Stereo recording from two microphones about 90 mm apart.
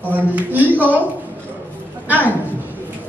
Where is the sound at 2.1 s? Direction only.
20° right (ahead or behind).